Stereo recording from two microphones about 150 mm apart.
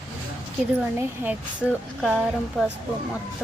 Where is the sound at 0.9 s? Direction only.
10° right (ahead or behind).